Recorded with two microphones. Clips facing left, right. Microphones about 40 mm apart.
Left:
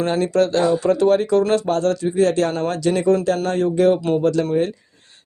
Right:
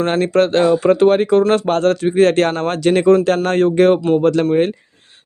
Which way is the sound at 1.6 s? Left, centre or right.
Right.